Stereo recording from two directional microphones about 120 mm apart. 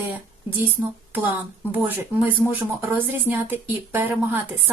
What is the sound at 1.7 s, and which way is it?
Speech, 15° right (ahead or behind).